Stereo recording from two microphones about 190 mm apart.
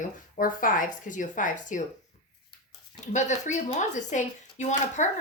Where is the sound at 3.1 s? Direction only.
40° left (ahead or behind).